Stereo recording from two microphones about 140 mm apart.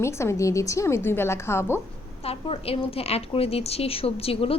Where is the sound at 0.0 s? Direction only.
20° left (ahead or behind).